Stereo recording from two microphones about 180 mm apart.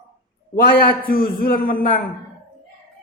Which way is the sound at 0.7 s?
55° left (ahead or behind).